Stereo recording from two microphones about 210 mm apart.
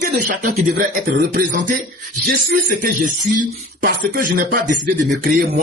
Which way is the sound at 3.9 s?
45° right (ahead or behind).